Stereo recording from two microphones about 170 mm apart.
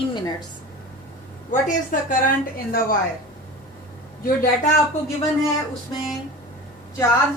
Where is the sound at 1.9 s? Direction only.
50° left (ahead or behind).